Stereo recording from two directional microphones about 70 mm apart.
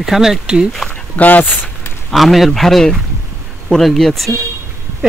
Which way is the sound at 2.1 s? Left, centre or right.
Centre.